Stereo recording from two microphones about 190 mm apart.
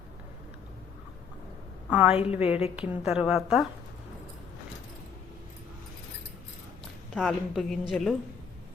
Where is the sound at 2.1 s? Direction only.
30° left (ahead or behind).